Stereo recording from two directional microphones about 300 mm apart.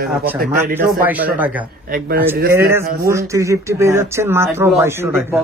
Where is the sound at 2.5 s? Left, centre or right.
Centre.